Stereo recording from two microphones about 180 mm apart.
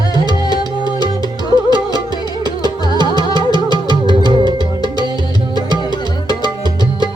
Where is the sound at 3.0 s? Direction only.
25° right (ahead or behind).